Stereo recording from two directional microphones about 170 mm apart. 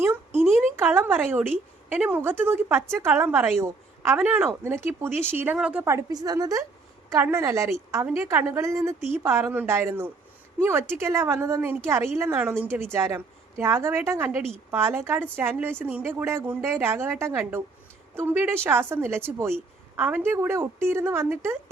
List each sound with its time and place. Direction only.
0.3 s a woman's voice: 15° right (ahead or behind)